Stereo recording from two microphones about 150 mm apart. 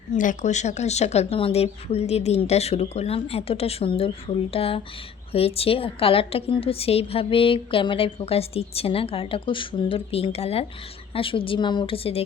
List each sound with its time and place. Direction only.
0.1 s a woman's voice: 55° left (ahead or behind); by 12.2 s 40° left (ahead or behind)